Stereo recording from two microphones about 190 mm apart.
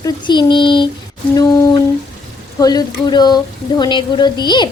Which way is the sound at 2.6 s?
20° left (ahead or behind).